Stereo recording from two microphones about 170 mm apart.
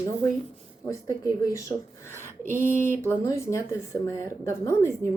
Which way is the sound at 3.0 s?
15° left (ahead or behind).